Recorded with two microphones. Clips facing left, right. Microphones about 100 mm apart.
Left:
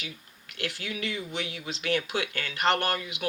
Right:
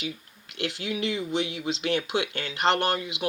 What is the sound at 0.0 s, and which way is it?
Speech, 25° right (ahead or behind).